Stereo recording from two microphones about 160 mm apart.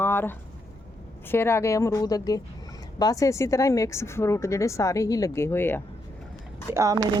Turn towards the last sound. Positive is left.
turn(degrees=-20)  # may be behind; listen again after turning